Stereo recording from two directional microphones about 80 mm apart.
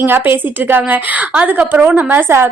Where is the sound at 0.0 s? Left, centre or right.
Right.